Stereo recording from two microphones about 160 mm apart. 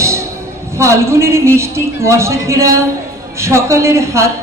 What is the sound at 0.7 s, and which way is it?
A woman's voice, 15° right (ahead or behind).